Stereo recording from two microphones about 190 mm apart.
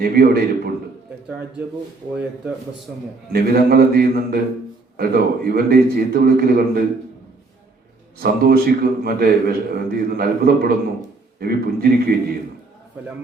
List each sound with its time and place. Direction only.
0.0 s a man's voice: 55° right (ahead or behind)
3.3 s a man's voice: 55° right (ahead or behind)
8.2 s a man's voice: 55° right (ahead or behind)